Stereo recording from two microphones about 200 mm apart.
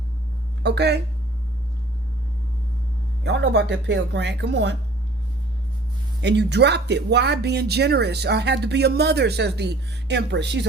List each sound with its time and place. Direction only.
0.6 s a woman's voice: 55° right (ahead or behind)
3.2 s speech: 60° right (ahead or behind)
6.2 s speech: 60° right (ahead or behind)